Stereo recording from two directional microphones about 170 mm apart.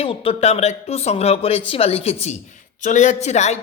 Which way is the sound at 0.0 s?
35° left (ahead or behind).